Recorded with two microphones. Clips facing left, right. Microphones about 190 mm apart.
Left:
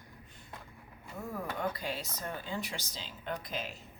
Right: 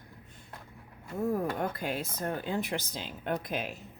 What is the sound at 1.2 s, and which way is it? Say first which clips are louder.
Speech: right 8 dB; 45° right (ahead or behind).